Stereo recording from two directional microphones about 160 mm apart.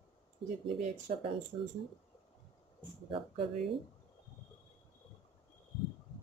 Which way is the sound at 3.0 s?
35° right (ahead or behind).